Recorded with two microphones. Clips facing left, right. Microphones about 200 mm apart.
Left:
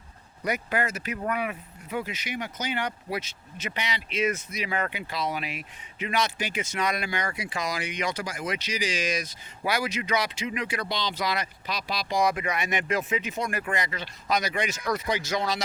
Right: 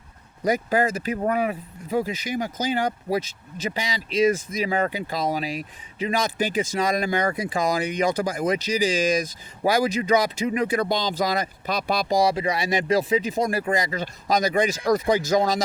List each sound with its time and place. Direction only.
0.4 s speech: 35° right (ahead or behind)
12.1 s speech: 30° right (ahead or behind)